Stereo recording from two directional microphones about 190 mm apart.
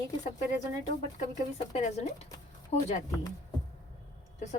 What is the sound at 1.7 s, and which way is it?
A woman's voice, 35° left (ahead or behind).